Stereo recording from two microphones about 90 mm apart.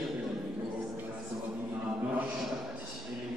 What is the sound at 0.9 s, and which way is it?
Music, 20° right (ahead or behind).